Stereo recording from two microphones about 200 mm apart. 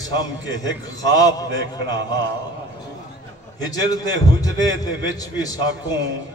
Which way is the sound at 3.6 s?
20° left (ahead or behind).